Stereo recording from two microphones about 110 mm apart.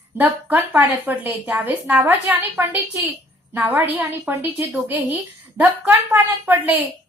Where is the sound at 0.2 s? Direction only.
20° right (ahead or behind).